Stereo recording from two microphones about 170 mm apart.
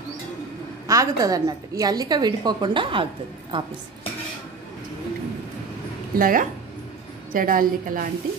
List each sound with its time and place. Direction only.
0.8 s a woman's voice: 20° right (ahead or behind)
6.1 s a woman's voice: 55° right (ahead or behind)